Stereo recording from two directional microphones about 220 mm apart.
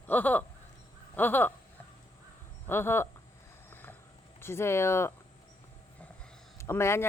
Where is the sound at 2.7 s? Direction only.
10° left (ahead or behind).